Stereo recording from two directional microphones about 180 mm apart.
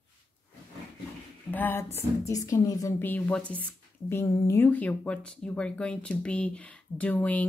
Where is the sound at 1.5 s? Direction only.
10° left (ahead or behind).